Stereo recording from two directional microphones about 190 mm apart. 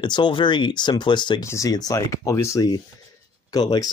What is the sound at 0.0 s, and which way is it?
Speech, 25° left (ahead or behind).